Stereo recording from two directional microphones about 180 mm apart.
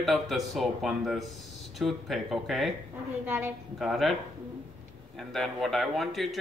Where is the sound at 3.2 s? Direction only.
10° right (ahead or behind).